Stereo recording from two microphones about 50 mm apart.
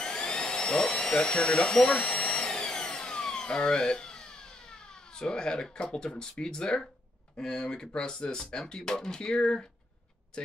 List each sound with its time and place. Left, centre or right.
0.0 s vacuum cleaner: centre
7.3 s speech: centre